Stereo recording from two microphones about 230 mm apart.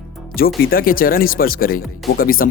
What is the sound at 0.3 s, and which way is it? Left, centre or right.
Speech, left.